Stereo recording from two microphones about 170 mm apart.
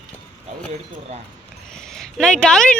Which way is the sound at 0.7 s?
40° right (ahead or behind).